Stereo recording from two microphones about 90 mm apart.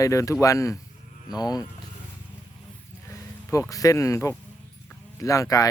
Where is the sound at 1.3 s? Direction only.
50° left (ahead or behind).